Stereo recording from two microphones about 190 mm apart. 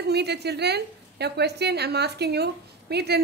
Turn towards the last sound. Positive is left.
turn(degrees=-60)  # may be behind; listen again after turning